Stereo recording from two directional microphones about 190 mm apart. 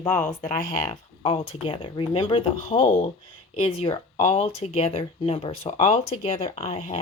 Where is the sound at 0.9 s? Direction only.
30° left (ahead or behind).